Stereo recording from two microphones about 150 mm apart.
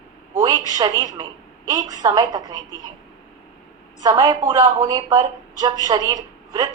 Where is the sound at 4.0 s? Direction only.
30° right (ahead or behind).